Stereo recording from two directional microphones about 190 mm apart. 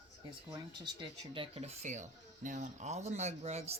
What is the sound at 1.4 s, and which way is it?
Speech, 30° right (ahead or behind).